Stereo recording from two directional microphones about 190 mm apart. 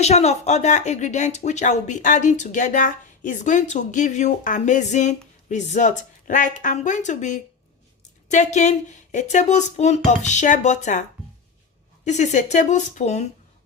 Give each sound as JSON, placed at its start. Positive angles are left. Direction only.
{"t": 0.0, "sound": "speech", "side_deg": 35}
{"t": 12.0, "sound": "speech", "side_deg": 40}